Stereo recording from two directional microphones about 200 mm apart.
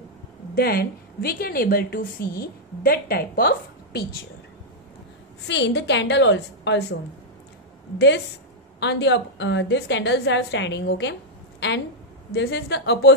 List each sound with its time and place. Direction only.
0.6 s a woman's voice: 50° left (ahead or behind)
5.5 s a woman's voice: 60° left (ahead or behind)
8.7 s a woman's voice: 60° left (ahead or behind)
12.3 s a woman's voice: 60° left (ahead or behind)